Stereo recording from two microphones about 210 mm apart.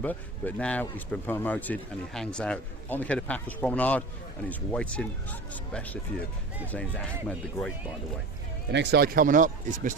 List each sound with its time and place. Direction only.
0.0 s speech: 10° left (ahead or behind)
8.7 s speech: 55° right (ahead or behind); by 9.9 s 40° right (ahead or behind)